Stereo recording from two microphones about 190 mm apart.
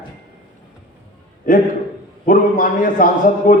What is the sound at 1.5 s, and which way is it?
A man's voice, 45° left (ahead or behind).